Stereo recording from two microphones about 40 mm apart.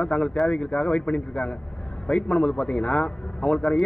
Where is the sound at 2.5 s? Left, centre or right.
Left.